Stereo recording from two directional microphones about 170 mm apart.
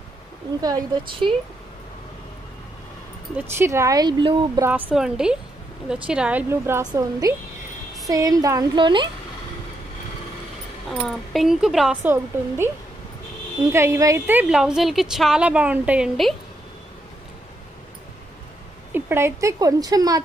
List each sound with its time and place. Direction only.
0.6 s speech: 20° right (ahead or behind)
3.3 s speech: 15° right (ahead or behind)
4.6 s a woman's voice: 10° right (ahead or behind); by 9.1 s 30° right (ahead or behind)
10.9 s a woman's voice: centre (ahead or behind)
18.9 s a woman's voice: 10° right (ahead or behind)